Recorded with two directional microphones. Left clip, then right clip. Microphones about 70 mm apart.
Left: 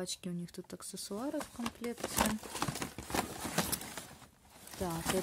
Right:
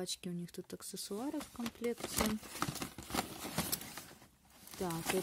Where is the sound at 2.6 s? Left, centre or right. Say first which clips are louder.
Even; centre.